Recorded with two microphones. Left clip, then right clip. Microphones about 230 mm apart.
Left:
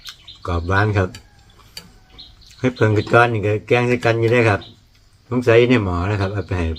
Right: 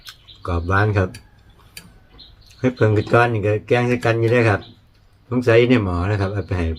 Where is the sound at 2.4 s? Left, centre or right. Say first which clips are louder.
Even; centre.